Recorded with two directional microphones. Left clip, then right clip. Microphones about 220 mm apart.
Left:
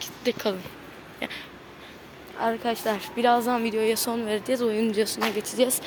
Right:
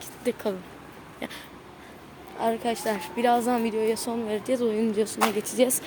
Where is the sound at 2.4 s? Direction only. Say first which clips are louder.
Even; 10° right (ahead or behind).